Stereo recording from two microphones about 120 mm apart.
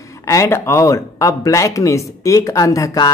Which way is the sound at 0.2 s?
25° left (ahead or behind).